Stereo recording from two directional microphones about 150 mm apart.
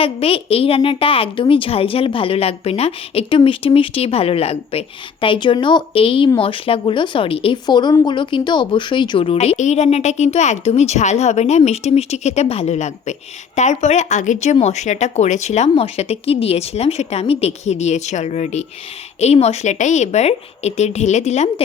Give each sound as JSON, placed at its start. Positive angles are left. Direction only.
{"t": 0.0, "sound": "a woman's voice", "side_deg": 40}